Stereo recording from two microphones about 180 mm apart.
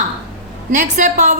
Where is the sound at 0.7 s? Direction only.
40° right (ahead or behind).